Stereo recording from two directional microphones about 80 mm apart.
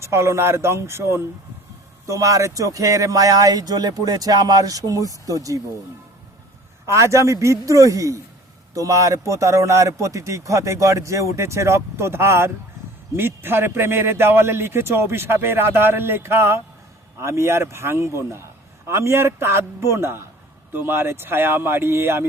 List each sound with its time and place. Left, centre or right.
0.0 s a man's voice: right
6.8 s a man's voice: right